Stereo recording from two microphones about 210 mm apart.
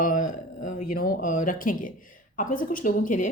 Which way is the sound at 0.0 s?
40° left (ahead or behind).